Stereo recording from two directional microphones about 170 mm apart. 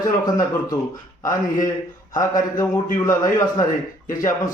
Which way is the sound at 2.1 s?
20° left (ahead or behind).